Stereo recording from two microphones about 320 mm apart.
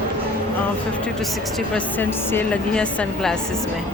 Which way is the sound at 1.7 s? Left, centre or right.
Centre.